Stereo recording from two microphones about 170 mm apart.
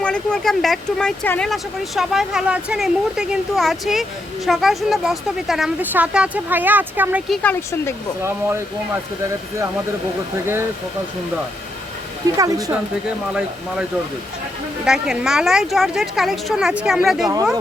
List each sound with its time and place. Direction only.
0.0 s speech: 5° left (ahead or behind); by 7.2 s 10° right (ahead or behind)
10.4 s speech: 15° right (ahead or behind)
12.4 s a woman's voice: 20° right (ahead or behind)
13.1 s speech: 5° right (ahead or behind)
14.8 s speech: 5° right (ahead or behind)